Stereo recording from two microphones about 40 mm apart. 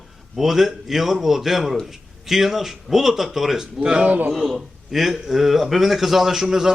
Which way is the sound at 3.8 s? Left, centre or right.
Right.